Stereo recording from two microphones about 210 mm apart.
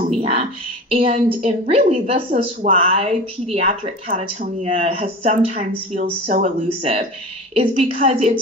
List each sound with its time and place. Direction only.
0.1 s speech: 30° right (ahead or behind)